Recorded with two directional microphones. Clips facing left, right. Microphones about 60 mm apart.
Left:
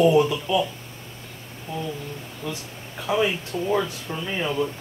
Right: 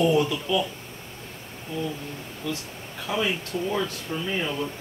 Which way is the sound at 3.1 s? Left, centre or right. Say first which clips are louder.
Left 5 dB; centre.